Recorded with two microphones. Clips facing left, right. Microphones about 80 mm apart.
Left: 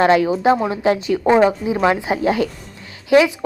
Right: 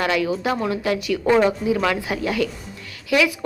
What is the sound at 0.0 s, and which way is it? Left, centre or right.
Speech, left.